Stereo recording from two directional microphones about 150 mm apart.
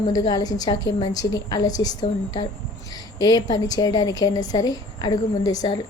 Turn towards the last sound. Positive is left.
turn(degrees=25)  # may be behind; listen again after turning